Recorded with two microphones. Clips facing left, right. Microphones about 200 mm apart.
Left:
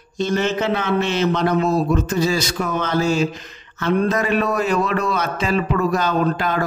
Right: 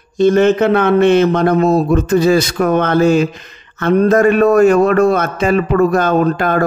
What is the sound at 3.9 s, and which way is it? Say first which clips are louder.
A man's voice: right 8 dB; 45° right (ahead or behind).